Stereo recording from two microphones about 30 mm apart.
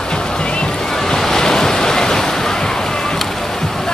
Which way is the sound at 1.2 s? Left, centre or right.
Centre.